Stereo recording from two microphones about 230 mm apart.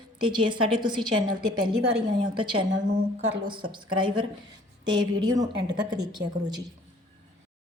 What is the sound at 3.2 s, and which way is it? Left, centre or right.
Speech, right.